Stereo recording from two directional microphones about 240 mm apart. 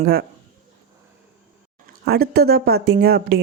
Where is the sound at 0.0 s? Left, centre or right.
Right.